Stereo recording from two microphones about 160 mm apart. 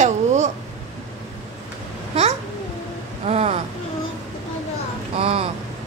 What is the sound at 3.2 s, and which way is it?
Speech, 40° right (ahead or behind).